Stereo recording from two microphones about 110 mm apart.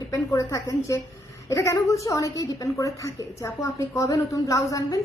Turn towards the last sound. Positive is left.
turn(degrees=30)  # may be behind; listen again after turning